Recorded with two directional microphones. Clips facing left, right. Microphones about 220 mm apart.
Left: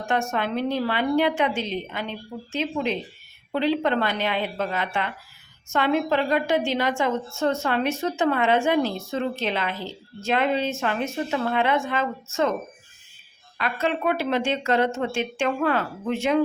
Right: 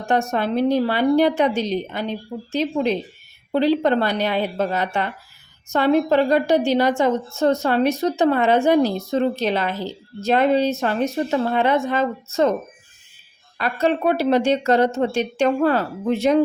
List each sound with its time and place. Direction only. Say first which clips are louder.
0.0 s a woman's voice: right 4 dB; 35° right (ahead or behind)
13.6 s a woman's voice: right 5 dB; 40° right (ahead or behind)